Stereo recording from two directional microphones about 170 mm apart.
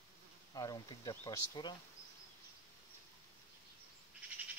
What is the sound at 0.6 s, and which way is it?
Speech, 20° left (ahead or behind).